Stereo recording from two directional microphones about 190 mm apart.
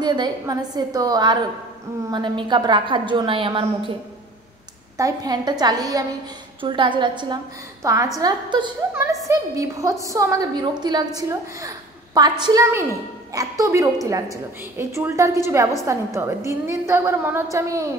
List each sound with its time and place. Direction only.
0.0 s a woman's voice: 25° right (ahead or behind)
4.9 s a woman's voice: 20° right (ahead or behind)